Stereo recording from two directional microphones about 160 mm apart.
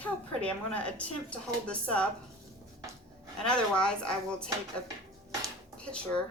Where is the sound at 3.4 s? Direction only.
5° left (ahead or behind).